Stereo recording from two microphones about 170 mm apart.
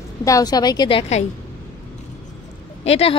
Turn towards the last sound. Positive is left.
turn(degrees=35)  # may be behind; listen again after turning